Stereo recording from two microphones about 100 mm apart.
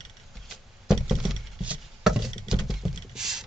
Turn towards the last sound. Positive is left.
turn(degrees=-5)  # may be behind; listen again after turning